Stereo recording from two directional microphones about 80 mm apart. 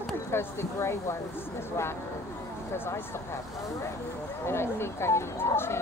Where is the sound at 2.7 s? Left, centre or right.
Left.